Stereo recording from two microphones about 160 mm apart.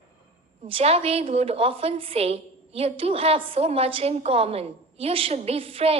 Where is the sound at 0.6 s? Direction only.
40° right (ahead or behind).